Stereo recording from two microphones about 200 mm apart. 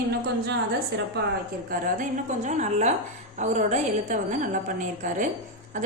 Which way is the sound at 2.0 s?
35° right (ahead or behind).